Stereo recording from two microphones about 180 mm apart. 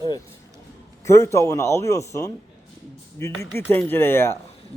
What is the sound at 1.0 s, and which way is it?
A man's voice, 15° left (ahead or behind).